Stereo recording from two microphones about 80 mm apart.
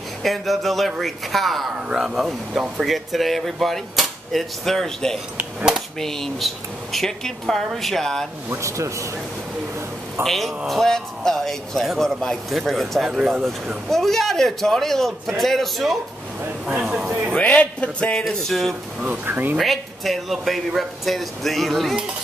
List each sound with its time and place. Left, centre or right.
0.2 s speech: centre
1.9 s speech: centre
8.5 s speech: right
10.2 s speech: centre
17.4 s speech: centre
18.9 s speech: right
19.5 s speech: centre